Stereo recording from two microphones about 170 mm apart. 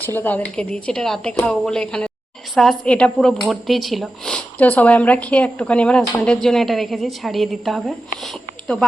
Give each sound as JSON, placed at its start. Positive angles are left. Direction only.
{"t": 0.0, "sound": "speech", "side_deg": 10}